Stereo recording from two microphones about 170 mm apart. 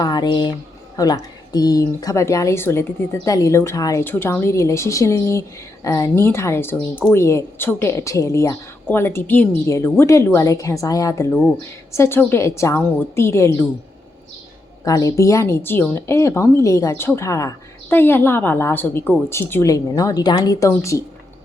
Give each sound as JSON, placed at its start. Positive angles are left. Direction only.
{"t": 0.0, "sound": "a sound", "side_deg": 25}
{"t": 0.9, "sound": "speech", "side_deg": 20}
{"t": 14.8, "sound": "speech", "side_deg": 20}